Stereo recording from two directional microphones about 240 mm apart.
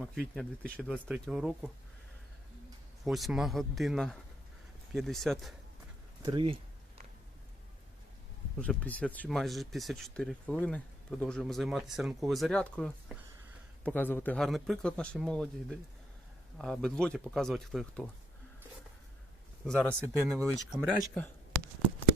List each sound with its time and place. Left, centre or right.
0.0 s speech: centre
3.0 s speech: centre
6.2 s speech: right
8.5 s speech: centre
19.6 s speech: centre